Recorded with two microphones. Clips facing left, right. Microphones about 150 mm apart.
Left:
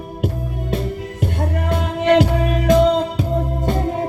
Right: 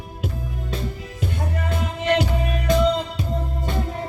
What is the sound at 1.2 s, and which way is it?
Music, 60° left (ahead or behind).